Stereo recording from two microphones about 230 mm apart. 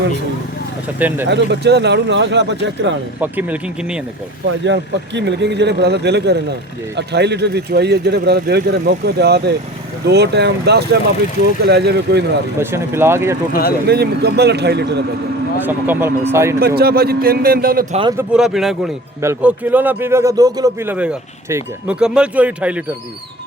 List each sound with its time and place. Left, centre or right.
0.9 s speech: centre
1.3 s speech: right
3.2 s speech: centre
4.6 s speech: right
12.5 s speech: centre
13.5 s speech: left
13.8 s speech: right
15.6 s speech: centre
16.6 s a man's voice: right
18.2 s speech: centre